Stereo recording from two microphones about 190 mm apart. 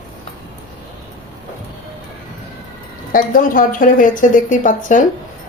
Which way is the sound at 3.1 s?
45° left (ahead or behind).